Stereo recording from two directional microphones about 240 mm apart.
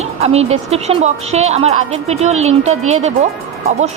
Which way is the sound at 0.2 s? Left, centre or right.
Right.